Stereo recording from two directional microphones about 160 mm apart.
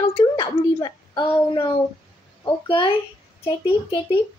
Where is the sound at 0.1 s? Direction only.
25° left (ahead or behind).